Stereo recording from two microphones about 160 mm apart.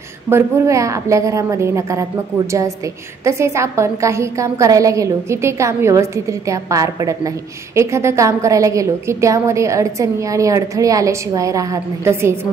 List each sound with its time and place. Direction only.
0.3 s a woman's voice: 20° right (ahead or behind)
3.3 s a woman's voice: 20° right (ahead or behind)